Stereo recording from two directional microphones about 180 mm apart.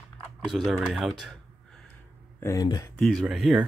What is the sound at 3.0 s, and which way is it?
Speech, centre (ahead or behind).